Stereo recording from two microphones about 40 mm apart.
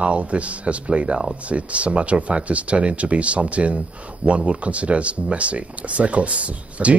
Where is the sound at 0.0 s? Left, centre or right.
Right.